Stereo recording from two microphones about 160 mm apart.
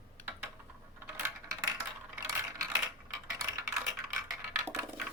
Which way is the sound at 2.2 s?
20° right (ahead or behind).